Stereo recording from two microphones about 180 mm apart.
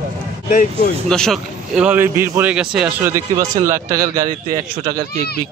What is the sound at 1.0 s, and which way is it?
A man's voice, 5° left (ahead or behind).